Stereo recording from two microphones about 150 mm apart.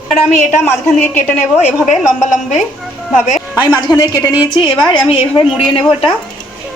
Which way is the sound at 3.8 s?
25° left (ahead or behind).